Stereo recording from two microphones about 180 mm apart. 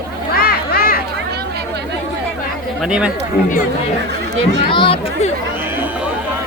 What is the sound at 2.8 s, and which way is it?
Speech, 5° right (ahead or behind).